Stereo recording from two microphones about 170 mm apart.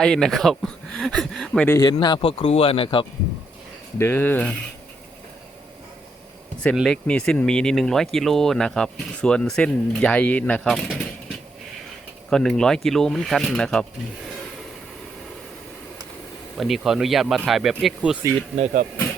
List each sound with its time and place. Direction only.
0.0 s speech: centre (ahead or behind)
1.6 s speech: 20° left (ahead or behind)
3.9 s speech: 15° left (ahead or behind)
6.7 s speech: 5° left (ahead or behind)
12.3 s speech: 5° left (ahead or behind)
16.6 s speech: centre (ahead or behind)
18.5 s speech: 40° right (ahead or behind)